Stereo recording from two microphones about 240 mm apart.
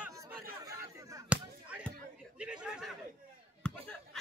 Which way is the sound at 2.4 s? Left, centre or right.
Centre.